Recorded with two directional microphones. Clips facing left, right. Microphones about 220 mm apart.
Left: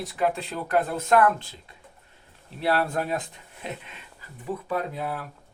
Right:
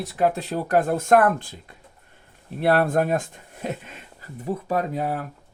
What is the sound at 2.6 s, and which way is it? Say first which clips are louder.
Speech: right 5 dB; 50° right (ahead or behind).